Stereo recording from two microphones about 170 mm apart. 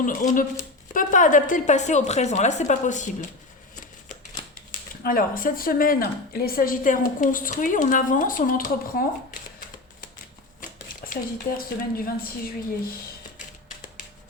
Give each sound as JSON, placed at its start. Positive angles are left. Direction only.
{"t": 0.0, "sound": "a woman's voice", "side_deg": 50}
{"t": 5.0, "sound": "a woman's voice", "side_deg": 55}
{"t": 10.6, "sound": "speech", "side_deg": 55}